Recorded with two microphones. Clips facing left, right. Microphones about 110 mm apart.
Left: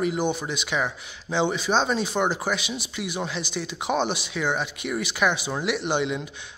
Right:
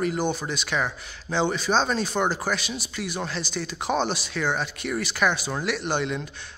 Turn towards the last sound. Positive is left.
turn(degrees=15)  # may be behind; listen again after turning